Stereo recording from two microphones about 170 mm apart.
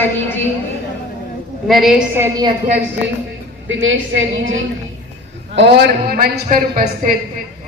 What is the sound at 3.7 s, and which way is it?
Speech, 90° right.